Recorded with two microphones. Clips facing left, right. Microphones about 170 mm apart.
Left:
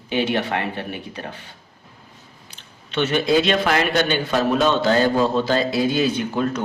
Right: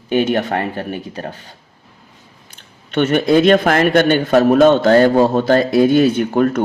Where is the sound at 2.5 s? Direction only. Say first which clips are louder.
Right 6 dB; 50° right (ahead or behind).